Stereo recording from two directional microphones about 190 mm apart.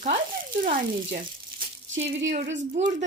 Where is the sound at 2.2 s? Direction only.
40° right (ahead or behind).